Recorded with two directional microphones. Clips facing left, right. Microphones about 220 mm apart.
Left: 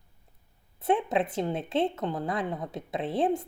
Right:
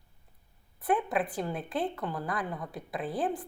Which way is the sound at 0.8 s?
25° left (ahead or behind).